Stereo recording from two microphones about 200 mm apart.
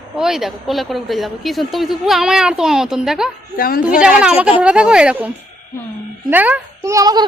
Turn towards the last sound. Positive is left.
turn(degrees=-20)  # may be behind; listen again after turning